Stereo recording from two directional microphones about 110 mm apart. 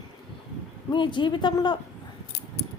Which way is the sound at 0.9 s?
45° left (ahead or behind).